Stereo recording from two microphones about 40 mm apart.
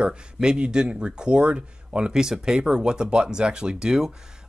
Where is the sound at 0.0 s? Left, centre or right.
Right.